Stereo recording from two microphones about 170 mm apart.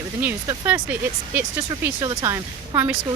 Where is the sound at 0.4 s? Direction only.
15° right (ahead or behind).